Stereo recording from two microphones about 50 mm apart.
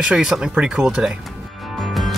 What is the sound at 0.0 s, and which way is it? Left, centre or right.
Speech, centre.